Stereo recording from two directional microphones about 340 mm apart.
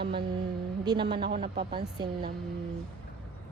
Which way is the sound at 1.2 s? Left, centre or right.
Right.